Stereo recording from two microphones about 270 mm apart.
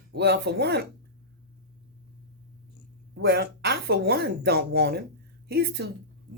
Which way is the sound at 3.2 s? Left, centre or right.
Right.